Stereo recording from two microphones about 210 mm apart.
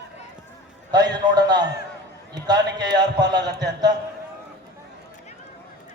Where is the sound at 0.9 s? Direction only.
20° right (ahead or behind).